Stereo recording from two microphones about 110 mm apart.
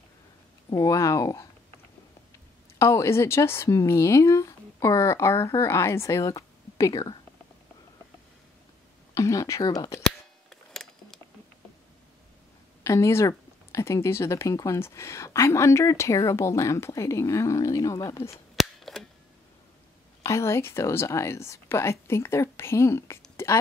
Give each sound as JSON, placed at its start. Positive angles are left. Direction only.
{"t": 0.7, "sound": "speech", "side_deg": 30}
{"t": 2.8, "sound": "speech", "side_deg": 25}
{"t": 9.1, "sound": "speech", "side_deg": 30}
{"t": 10.5, "sound": "a sound", "side_deg": 5}
{"t": 12.8, "sound": "speech", "side_deg": 25}
{"t": 18.6, "sound": "cap gun", "side_deg": 0}
{"t": 20.2, "sound": "speech", "side_deg": 25}
{"t": 23.3, "sound": "a sound", "side_deg": 25}